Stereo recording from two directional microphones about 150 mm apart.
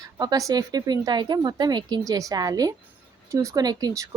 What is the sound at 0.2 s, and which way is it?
A woman's voice, 25° right (ahead or behind).